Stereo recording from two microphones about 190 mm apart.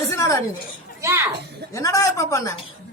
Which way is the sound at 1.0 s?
15° right (ahead or behind).